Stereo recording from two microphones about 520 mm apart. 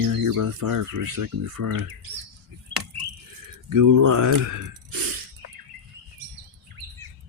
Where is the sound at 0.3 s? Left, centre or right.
Right.